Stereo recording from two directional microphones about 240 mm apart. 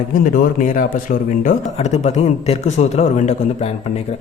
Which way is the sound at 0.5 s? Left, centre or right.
Left.